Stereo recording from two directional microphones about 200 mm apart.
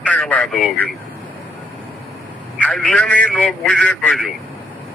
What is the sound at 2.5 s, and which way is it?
Speech, 5° left (ahead or behind).